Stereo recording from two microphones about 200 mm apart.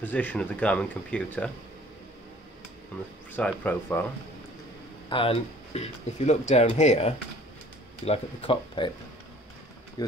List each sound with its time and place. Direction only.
0.0 s speech: 10° left (ahead or behind)
3.3 s speech: 10° left (ahead or behind)
5.1 s speech: 30° left (ahead or behind)
10.0 s a sound: 20° left (ahead or behind)